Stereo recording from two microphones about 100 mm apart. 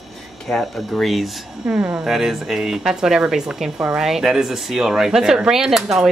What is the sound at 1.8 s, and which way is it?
Speech, 20° right (ahead or behind).